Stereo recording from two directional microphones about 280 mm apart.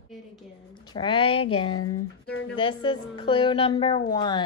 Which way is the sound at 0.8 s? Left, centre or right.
Centre.